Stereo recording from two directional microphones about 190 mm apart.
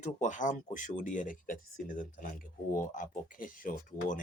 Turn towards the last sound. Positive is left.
turn(degrees=45)  # may be behind; listen again after turning